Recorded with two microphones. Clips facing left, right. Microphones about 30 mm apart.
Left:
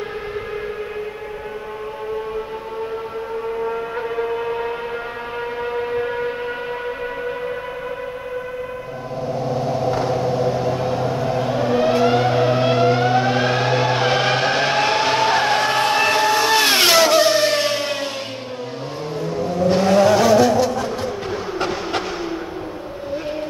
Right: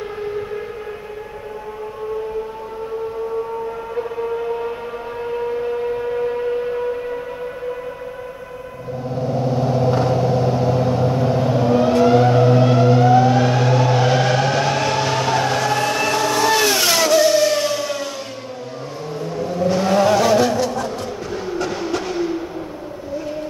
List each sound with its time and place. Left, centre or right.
3.6 s a sound: left
5.2 s civil defense siren: left
10.9 s vehicle: centre
16.6 s vehicle: left
20.2 s music: centre
21.5 s vehicle: left